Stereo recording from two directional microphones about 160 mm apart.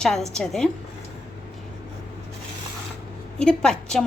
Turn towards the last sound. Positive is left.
turn(degrees=5)  # may be behind; listen again after turning